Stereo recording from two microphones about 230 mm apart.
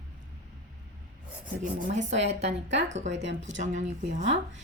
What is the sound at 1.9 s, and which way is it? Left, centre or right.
Speech, right.